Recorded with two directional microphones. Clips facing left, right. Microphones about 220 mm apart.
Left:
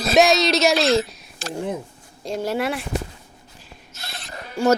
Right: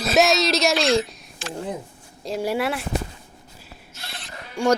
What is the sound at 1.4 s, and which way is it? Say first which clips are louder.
Speech: left 2 dB; 40° left (ahead or behind).